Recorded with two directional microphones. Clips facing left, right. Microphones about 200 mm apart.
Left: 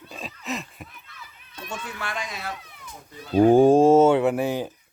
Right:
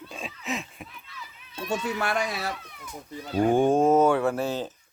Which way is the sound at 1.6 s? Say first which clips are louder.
Right 7 dB; 40° right (ahead or behind).